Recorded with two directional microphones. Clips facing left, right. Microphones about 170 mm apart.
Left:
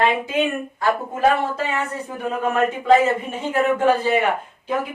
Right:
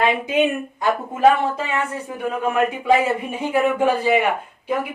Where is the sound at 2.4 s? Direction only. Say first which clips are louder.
Even; 10° right (ahead or behind).